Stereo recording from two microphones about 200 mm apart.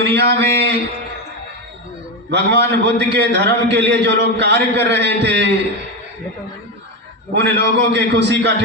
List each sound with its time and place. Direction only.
0.0 s a man's voice: 55° right (ahead or behind)
2.3 s a man's voice: 60° right (ahead or behind)
7.3 s a man's voice: 60° right (ahead or behind)